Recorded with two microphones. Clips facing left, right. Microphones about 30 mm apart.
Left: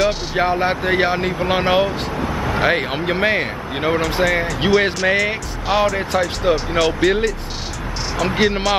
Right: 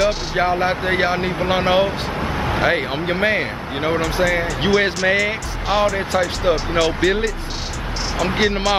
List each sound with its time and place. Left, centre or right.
0.0 s speech: centre
2.1 s vehicle: right
2.6 s speech: centre
8.4 s speech: centre